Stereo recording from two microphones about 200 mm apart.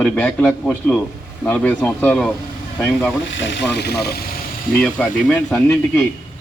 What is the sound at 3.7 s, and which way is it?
Speech, 55° left (ahead or behind).